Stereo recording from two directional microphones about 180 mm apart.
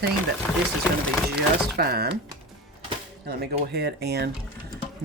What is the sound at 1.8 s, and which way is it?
Speech, 60° right (ahead or behind).